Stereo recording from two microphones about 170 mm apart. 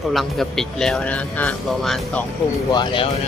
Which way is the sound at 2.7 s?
25° left (ahead or behind).